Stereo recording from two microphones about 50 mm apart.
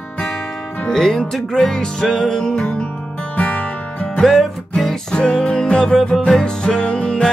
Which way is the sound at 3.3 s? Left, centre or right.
Left.